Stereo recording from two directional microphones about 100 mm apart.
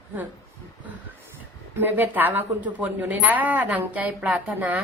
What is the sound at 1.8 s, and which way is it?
A woman's voice, 20° right (ahead or behind).